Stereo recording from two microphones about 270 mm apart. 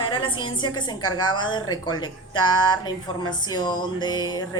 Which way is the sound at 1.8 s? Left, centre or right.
Left.